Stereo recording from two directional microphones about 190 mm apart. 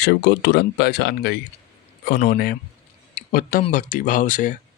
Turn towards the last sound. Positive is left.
turn(degrees=45)  # may be behind; listen again after turning